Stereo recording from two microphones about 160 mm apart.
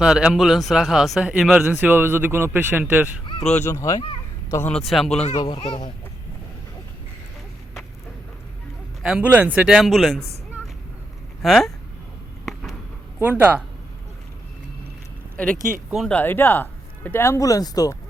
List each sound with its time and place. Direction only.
0.0 s speech: 5° right (ahead or behind)
3.4 s speech: 45° left (ahead or behind)
3.7 s speech: 20° left (ahead or behind); by 5.2 s centre (ahead or behind)
5.4 s speech: 30° left (ahead or behind)
9.0 s speech: 5° right (ahead or behind)
11.4 s speech: centre (ahead or behind)
13.2 s speech: 10° right (ahead or behind)
15.9 s speech: centre (ahead or behind); by 17.9 s 20° left (ahead or behind)